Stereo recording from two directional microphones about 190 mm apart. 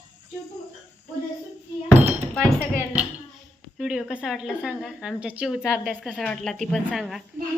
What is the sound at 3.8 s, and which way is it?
A woman's voice, 5° right (ahead or behind).